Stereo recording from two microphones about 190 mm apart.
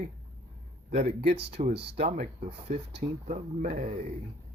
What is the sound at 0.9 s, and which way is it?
Speech, 35° right (ahead or behind).